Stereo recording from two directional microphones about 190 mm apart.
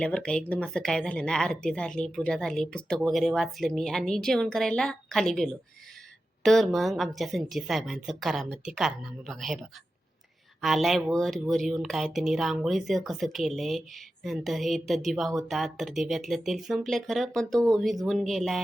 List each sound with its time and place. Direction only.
0.0 s speech: 5° left (ahead or behind)